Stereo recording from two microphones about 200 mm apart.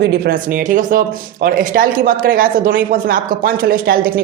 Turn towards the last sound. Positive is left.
turn(degrees=-45)  # may be behind; listen again after turning